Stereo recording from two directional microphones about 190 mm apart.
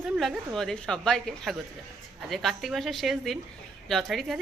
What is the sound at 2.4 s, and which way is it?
Speech, centre (ahead or behind).